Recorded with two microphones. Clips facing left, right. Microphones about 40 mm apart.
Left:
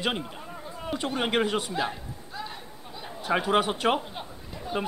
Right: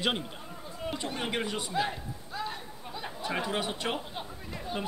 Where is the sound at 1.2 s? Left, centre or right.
Left.